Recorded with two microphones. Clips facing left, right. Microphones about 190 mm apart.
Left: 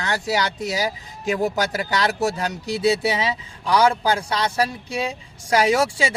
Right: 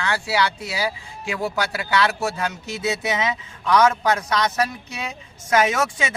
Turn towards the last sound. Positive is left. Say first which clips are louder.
# left 4 dB
turn(degrees=30)  # may be behind; listen again after turning